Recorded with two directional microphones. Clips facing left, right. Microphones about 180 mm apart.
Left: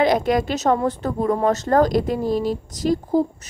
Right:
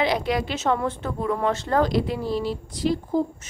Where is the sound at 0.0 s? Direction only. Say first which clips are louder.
Left 5 dB; 45° left (ahead or behind).